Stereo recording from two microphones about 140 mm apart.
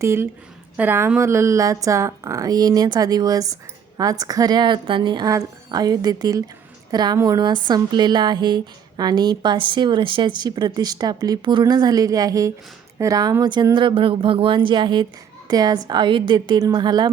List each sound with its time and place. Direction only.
0.0 s a woman's voice: 20° right (ahead or behind)